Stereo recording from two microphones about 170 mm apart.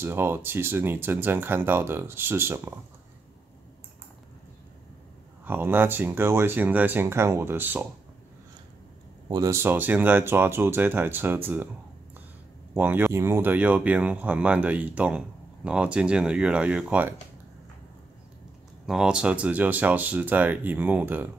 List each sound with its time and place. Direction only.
0.0 s speech: 15° right (ahead or behind)
5.4 s speech: 10° right (ahead or behind)
9.3 s speech: 20° right (ahead or behind)
12.7 s speech: 10° right (ahead or behind)
18.9 s speech: 5° right (ahead or behind)